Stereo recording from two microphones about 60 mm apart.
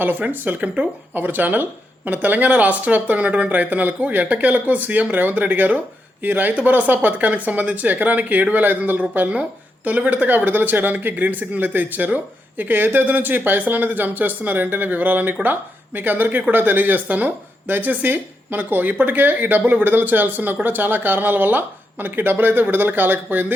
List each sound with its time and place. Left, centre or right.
0.0 s speech: right